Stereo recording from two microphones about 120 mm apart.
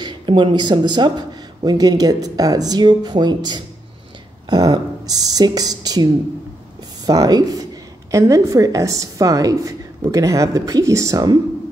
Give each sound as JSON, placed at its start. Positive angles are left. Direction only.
{"t": 0.0, "sound": "speech", "side_deg": -40}
{"t": 7.1, "sound": "a woman's voice", "side_deg": -35}